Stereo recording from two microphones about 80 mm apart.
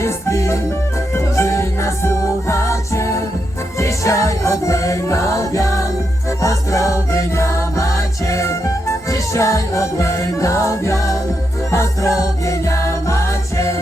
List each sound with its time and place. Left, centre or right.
0.0 s music: left